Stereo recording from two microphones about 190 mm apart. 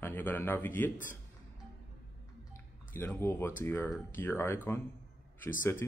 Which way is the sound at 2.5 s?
10° left (ahead or behind).